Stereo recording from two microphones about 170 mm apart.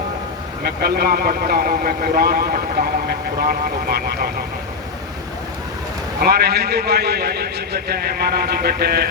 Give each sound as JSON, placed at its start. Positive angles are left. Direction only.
{"t": 0.6, "sound": "speech", "side_deg": -65}
{"t": 6.2, "sound": "a man's voice", "side_deg": -65}